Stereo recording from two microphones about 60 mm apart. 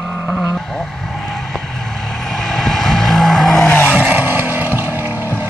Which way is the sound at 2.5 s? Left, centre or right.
Centre.